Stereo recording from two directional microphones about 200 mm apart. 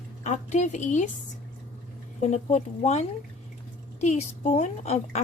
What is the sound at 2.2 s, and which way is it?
Speech, 35° left (ahead or behind).